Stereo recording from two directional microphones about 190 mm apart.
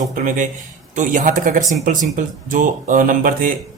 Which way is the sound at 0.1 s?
40° right (ahead or behind).